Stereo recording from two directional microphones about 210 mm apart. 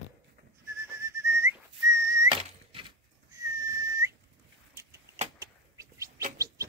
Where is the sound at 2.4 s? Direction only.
25° right (ahead or behind).